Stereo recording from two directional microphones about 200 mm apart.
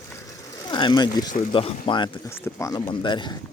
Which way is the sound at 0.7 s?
20° left (ahead or behind).